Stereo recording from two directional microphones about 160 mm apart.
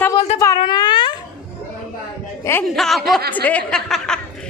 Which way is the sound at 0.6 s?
25° left (ahead or behind).